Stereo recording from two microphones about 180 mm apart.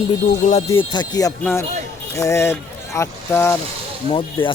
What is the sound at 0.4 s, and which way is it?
Speech, 45° left (ahead or behind).